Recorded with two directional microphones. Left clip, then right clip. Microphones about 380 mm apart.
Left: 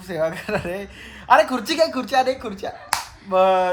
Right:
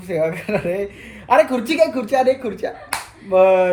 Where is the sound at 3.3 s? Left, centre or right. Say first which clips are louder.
Right 4 dB; centre.